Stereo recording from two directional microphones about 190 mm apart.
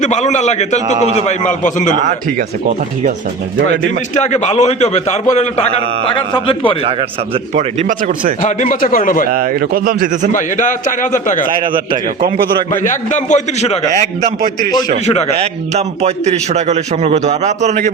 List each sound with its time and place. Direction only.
0.0 s a man's voice: 40° left (ahead or behind)
4.2 s a man's voice: 35° left (ahead or behind)
7.5 s a man's voice: 40° right (ahead or behind)
8.4 s a man's voice: 40° left (ahead or behind)
9.3 s speech: 50° right (ahead or behind)
10.3 s a man's voice: 40° left (ahead or behind)
11.6 s a man's voice: 25° right (ahead or behind)
12.8 s a man's voice: 40° left (ahead or behind)
15.0 s a man's voice: 35° left (ahead or behind)
15.4 s a man's voice: 35° right (ahead or behind)